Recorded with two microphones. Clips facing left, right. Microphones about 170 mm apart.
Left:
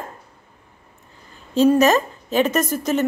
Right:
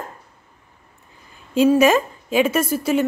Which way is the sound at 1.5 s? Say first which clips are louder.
Even; 10° right (ahead or behind).